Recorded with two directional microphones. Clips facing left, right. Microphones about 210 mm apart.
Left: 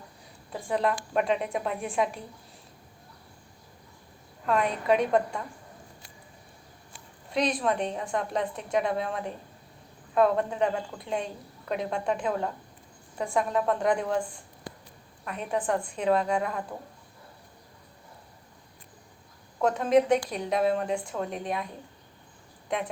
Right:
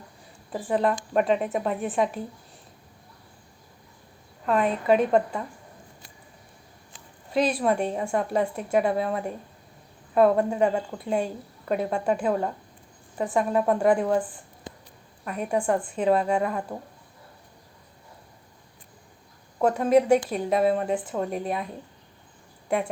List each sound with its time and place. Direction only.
0.5 s a woman's voice: 5° right (ahead or behind)
4.4 s a woman's voice: centre (ahead or behind)
7.3 s a woman's voice: 5° right (ahead or behind)
14.7 s a sound: 20° right (ahead or behind)
15.2 s a woman's voice: 5° right (ahead or behind)
19.6 s a woman's voice: 5° right (ahead or behind)